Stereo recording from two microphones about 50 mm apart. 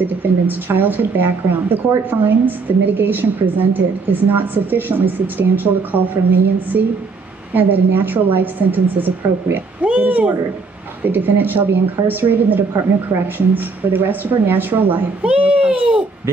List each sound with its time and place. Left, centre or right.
0.0 s a woman's voice: right
11.1 s a woman's voice: right
13.9 s a woman's voice: right
15.2 s a child's voice: right